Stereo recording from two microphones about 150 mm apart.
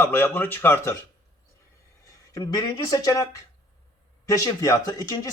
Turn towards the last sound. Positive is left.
turn(degrees=25)  # may be behind; listen again after turning